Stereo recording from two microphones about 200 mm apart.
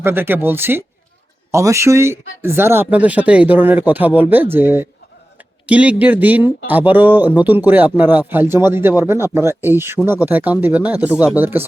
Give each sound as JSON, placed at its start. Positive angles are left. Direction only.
{"t": 0.0, "sound": "speech", "side_deg": -10}